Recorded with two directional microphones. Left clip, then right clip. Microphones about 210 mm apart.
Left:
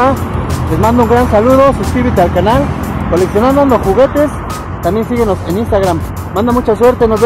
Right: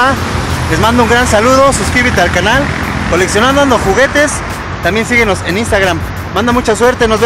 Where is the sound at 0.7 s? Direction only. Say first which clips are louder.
Right 1 dB; 30° right (ahead or behind).